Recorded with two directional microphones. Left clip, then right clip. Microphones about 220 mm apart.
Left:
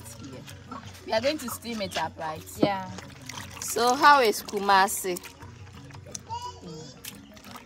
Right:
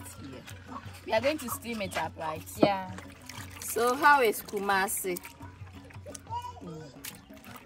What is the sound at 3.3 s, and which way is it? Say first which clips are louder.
Pour: left 4 dB; 15° left (ahead or behind).